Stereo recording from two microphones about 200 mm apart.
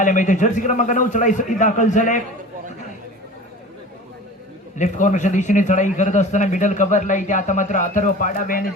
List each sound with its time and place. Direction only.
0.0 s a man's voice: 40° left (ahead or behind)
4.8 s a man's voice: 40° left (ahead or behind)